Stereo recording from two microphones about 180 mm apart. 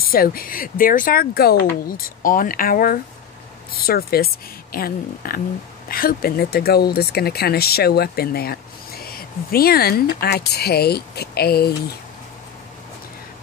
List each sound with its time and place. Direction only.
0.0 s speech: 55° left (ahead or behind)